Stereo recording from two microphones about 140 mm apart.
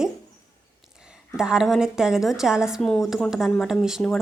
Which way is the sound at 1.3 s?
5° right (ahead or behind).